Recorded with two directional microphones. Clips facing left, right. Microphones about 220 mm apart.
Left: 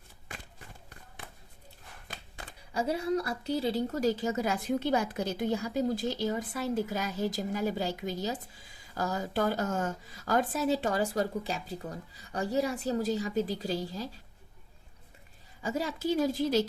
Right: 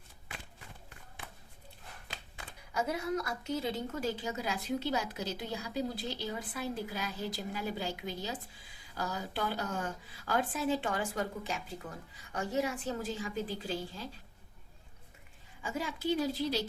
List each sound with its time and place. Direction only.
2.7 s a woman's voice: 30° left (ahead or behind)
15.6 s a woman's voice: 40° left (ahead or behind)